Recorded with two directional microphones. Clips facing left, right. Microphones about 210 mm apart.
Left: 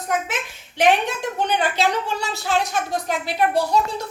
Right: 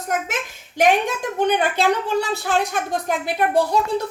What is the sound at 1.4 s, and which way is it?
A woman's voice, 55° right (ahead or behind).